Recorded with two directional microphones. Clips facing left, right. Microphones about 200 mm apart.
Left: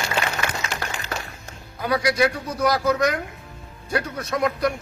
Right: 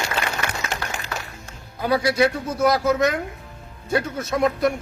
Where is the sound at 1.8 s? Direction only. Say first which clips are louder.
Right 2 dB; 25° right (ahead or behind).